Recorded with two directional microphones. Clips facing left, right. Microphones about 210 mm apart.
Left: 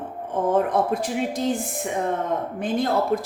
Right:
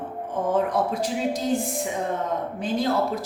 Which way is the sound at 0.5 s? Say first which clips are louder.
Left 2 dB; 55° left (ahead or behind).